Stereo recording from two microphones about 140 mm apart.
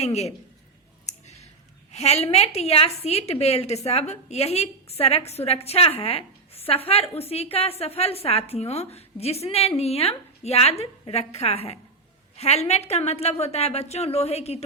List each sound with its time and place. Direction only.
0.0 s a woman's voice: 50° left (ahead or behind)
1.9 s a woman's voice: 50° left (ahead or behind)